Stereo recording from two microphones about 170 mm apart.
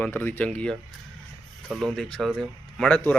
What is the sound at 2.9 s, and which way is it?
Speech, 10° left (ahead or behind).